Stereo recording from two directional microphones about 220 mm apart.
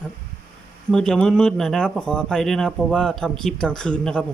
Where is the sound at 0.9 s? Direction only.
5° left (ahead or behind).